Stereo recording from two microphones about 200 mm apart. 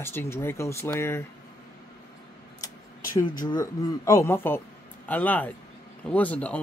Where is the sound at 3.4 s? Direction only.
15° left (ahead or behind).